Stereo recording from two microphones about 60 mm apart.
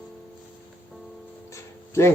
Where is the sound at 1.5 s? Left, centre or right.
Left.